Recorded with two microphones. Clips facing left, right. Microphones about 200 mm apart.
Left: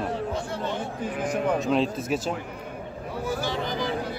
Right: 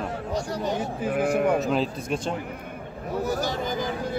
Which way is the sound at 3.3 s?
40° right (ahead or behind).